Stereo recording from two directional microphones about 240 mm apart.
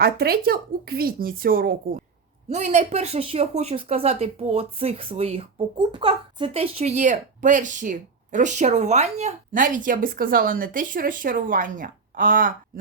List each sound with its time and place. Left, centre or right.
0.0 s speech: right